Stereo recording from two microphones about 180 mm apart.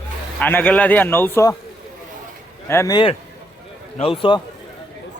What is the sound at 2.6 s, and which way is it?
Speech, 15° left (ahead or behind).